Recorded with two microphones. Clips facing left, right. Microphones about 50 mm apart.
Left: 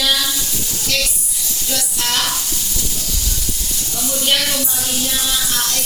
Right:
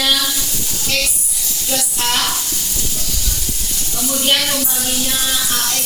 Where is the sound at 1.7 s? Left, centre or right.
Right.